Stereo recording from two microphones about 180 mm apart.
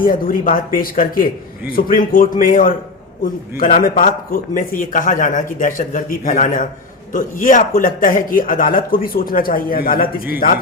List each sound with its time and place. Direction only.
0.0 s a man's voice: 50° left (ahead or behind)